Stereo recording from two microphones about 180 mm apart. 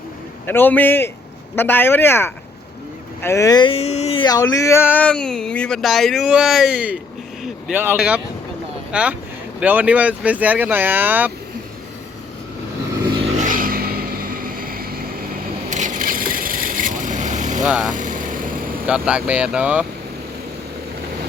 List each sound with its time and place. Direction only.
0.4 s speech: 10° left (ahead or behind); by 11.3 s 10° right (ahead or behind)
13.3 s vehicle: 45° right (ahead or behind)
15.7 s vehicle: 45° right (ahead or behind)
17.7 s speech: centre (ahead or behind)
17.9 s vehicle: 45° right (ahead or behind)
18.9 s speech: 5° right (ahead or behind)